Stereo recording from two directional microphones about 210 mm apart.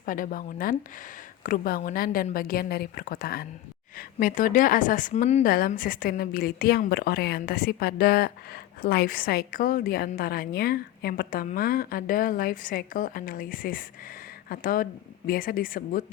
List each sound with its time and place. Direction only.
0.0 s a woman's voice: 40° left (ahead or behind)